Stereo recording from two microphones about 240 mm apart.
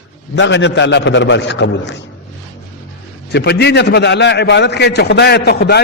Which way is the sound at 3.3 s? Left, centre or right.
Left.